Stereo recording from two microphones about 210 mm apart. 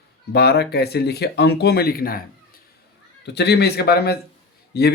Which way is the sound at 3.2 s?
50° left (ahead or behind).